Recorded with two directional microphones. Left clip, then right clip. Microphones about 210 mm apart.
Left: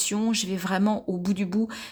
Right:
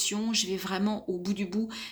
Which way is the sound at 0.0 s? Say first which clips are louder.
Left 2 dB; 35° left (ahead or behind).